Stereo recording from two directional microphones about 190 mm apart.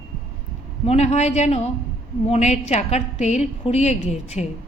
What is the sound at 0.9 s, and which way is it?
A woman's voice, 35° left (ahead or behind).